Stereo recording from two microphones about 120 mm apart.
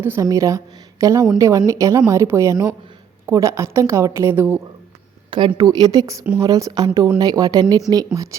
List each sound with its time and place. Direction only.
0.0 s a woman's voice: 20° right (ahead or behind)
5.5 s speech: 30° right (ahead or behind)